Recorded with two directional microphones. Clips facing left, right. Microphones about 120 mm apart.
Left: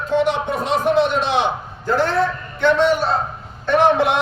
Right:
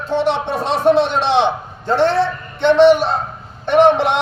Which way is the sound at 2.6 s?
25° right (ahead or behind).